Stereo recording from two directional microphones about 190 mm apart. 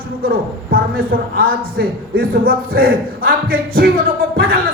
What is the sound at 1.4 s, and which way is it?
A man's voice, 50° right (ahead or behind).